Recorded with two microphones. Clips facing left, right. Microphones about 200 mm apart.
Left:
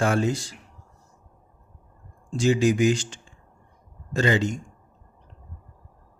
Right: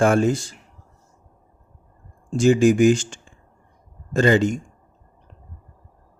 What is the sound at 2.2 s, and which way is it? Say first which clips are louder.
A man's voice: right 5 dB; 50° right (ahead or behind).